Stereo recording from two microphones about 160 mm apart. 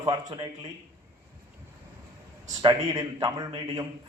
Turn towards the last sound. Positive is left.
turn(degrees=-25)  # may be behind; listen again after turning